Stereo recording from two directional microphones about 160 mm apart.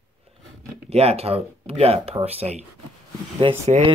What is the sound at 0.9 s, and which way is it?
Speech, 40° right (ahead or behind).